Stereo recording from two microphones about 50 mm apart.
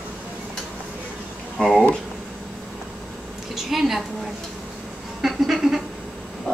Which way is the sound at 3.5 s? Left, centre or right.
Centre.